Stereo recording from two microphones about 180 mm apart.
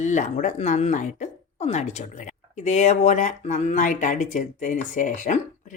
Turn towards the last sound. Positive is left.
turn(degrees=45)  # may be behind; listen again after turning